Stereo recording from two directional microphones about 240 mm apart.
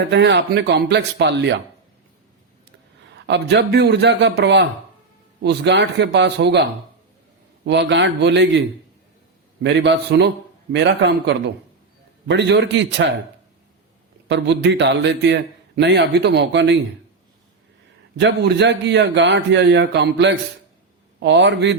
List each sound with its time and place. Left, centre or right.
0.1 s a man's voice: right
3.2 s a man's voice: right
9.6 s a man's voice: right
14.3 s a man's voice: right
18.2 s a man's voice: right